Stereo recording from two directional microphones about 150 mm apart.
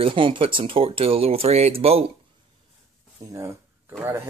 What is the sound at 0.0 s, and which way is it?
Speech, 35° right (ahead or behind).